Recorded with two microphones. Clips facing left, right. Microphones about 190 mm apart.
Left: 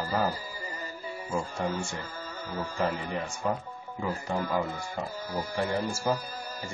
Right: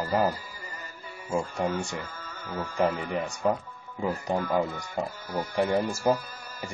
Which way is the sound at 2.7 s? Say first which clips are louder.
Right 5 dB; 15° right (ahead or behind).